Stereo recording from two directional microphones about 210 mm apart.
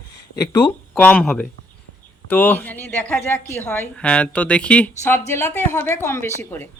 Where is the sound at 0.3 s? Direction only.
10° left (ahead or behind).